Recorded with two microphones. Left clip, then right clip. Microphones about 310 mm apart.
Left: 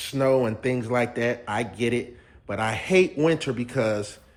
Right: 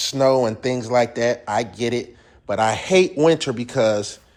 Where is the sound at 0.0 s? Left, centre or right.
Centre.